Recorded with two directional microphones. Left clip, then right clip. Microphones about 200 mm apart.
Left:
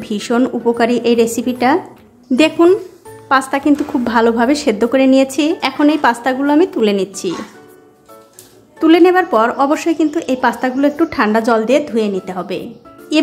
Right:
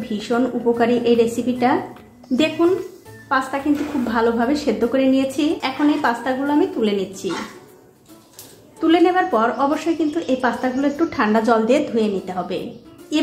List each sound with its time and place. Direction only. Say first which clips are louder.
0.0 s a woman's voice: left 5 dB; 40° left (ahead or behind)
8.7 s a woman's voice: left 6 dB; 35° left (ahead or behind)
13.1 s speech: left 7 dB; 45° left (ahead or behind)